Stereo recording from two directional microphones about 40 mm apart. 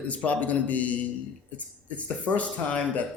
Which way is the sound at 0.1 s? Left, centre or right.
Left.